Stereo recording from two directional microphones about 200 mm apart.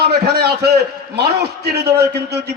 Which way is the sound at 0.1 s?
55° right (ahead or behind).